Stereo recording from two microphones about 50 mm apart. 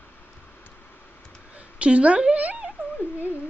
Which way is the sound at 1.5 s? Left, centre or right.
Right.